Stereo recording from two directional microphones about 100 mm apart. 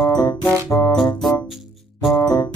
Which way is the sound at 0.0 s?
40° left (ahead or behind).